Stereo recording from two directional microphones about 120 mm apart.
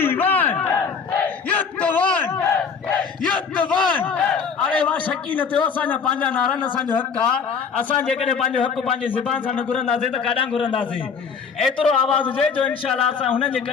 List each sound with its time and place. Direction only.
0.0 s battle cry: 15° left (ahead or behind)
3.6 s battle cry: 10° left (ahead or behind)
4.6 s a man's voice: 10° left (ahead or behind)
8.2 s a man's voice: 60° left (ahead or behind)
11.6 s a man's voice: 5° left (ahead or behind)